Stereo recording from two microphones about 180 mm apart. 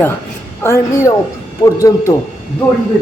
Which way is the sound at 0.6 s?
15° left (ahead or behind).